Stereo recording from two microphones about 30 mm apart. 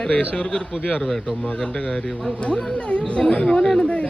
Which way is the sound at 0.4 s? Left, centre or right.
Left.